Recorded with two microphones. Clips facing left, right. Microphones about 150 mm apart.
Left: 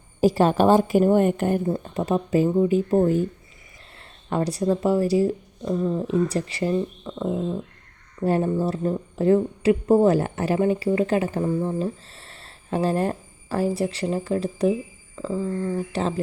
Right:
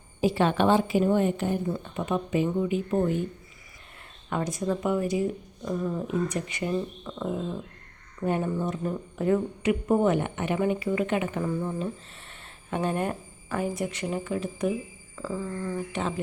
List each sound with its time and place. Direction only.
0.2 s speech: 40° left (ahead or behind)
4.3 s speech: 35° left (ahead or behind)
5.6 s speech: 25° left (ahead or behind)
6.7 s speech: 15° left (ahead or behind)
8.2 s speech: 30° left (ahead or behind)
15.1 s speech: 20° left (ahead or behind)